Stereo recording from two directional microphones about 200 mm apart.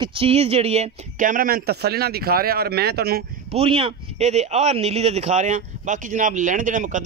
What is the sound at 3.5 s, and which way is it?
Speech, 30° right (ahead or behind).